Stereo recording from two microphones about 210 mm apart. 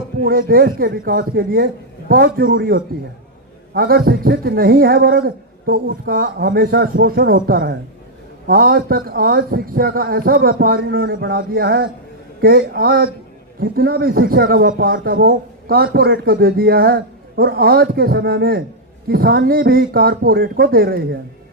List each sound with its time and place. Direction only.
0.2 s a man's voice: 45° right (ahead or behind)